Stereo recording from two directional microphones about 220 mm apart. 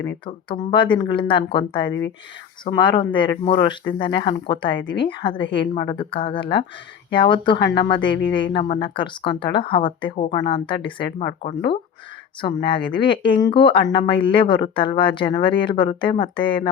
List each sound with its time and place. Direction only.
0.6 s speech: 20° left (ahead or behind)
12.4 s speech: 20° left (ahead or behind)